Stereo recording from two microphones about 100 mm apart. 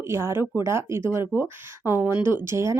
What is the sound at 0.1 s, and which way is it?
Speech, 25° right (ahead or behind).